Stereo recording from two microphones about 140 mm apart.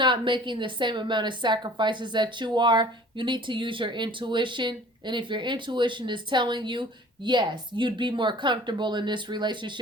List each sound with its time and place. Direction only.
0.0 s a woman's voice: 35° right (ahead or behind)